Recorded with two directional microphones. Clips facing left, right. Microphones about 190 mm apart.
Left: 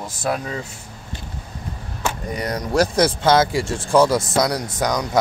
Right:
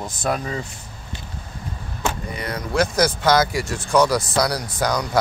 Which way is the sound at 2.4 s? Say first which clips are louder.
Left 3 dB; 40° left (ahead or behind).